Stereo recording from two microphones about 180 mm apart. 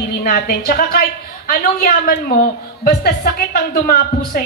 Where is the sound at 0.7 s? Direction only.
55° left (ahead or behind).